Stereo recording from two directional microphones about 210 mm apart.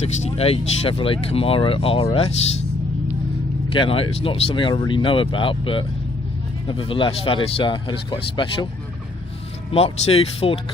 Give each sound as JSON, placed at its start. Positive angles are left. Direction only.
{"t": 0.0, "sound": "speech", "side_deg": 30}
{"t": 3.7, "sound": "speech", "side_deg": 25}
{"t": 9.7, "sound": "speech", "side_deg": 30}